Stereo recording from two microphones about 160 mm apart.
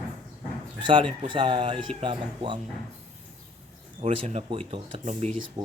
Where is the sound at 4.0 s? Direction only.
40° right (ahead or behind).